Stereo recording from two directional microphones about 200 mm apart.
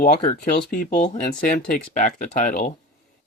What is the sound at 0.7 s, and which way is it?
Speech, 40° left (ahead or behind).